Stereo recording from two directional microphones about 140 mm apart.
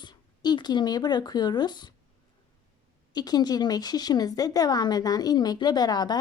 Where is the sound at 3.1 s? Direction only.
30° left (ahead or behind).